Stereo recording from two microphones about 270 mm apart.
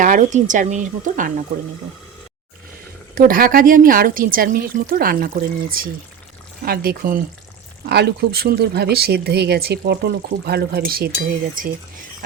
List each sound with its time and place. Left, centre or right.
0.0 s speech: right
3.2 s speech: right